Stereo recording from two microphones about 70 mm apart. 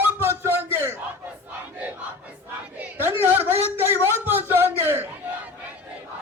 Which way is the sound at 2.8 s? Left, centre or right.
Right.